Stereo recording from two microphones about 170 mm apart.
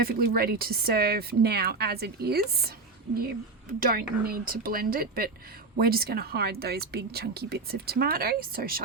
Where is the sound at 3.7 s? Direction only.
60° right (ahead or behind).